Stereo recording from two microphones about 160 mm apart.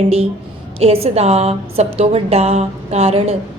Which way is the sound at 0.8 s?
40° right (ahead or behind).